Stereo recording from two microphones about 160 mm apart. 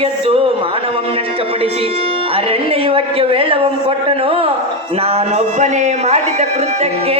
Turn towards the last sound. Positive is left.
turn(degrees=-45)  # may be behind; listen again after turning